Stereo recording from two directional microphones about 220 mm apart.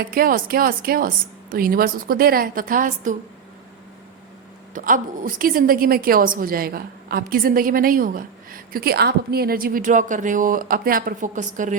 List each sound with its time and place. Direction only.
0.0 s a woman's voice: 40° right (ahead or behind)
4.7 s a woman's voice: 40° right (ahead or behind)